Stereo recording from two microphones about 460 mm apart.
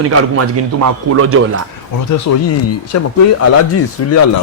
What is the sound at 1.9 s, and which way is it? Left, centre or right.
Speech, left.